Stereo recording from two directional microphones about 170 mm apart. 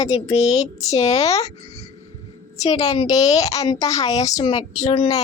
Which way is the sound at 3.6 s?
20° left (ahead or behind).